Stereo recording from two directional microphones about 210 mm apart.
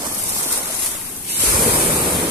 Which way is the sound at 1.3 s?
45° right (ahead or behind).